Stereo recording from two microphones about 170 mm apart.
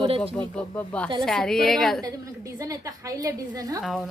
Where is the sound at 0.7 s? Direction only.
15° left (ahead or behind).